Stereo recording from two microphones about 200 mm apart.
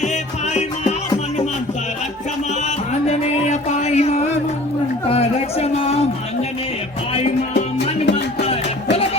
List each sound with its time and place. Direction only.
0.0 s music: 35° left (ahead or behind)
2.6 s music: 35° left (ahead or behind)
5.0 s a sound: 30° left (ahead or behind)
7.1 s music: 30° left (ahead or behind)
7.5 s music: 55° left (ahead or behind)
8.1 s music: 30° left (ahead or behind)